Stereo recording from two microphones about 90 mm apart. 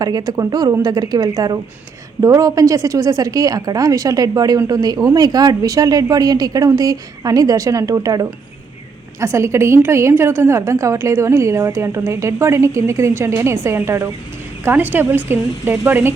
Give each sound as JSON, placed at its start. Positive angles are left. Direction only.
{"t": 0.0, "sound": "a woman's voice", "side_deg": -45}